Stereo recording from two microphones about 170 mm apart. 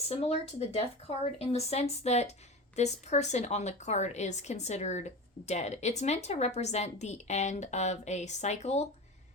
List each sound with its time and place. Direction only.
0.1 s a woman's voice: 35° left (ahead or behind)